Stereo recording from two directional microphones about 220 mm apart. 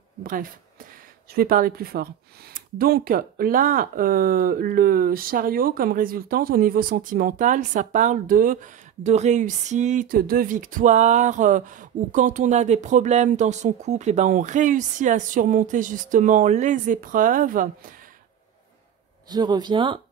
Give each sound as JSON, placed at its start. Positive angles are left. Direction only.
{"t": 0.2, "sound": "a woman's voice", "side_deg": -40}
{"t": 19.2, "sound": "speech", "side_deg": -20}